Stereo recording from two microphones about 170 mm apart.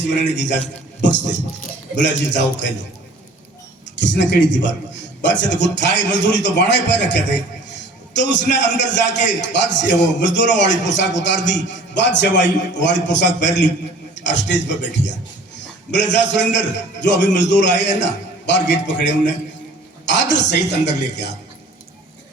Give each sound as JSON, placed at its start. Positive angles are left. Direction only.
{"t": 0.3, "sound": "a man's voice", "side_deg": 90}
{"t": 2.0, "sound": "a man's voice", "side_deg": 90}
{"t": 4.0, "sound": "a man's voice", "side_deg": 90}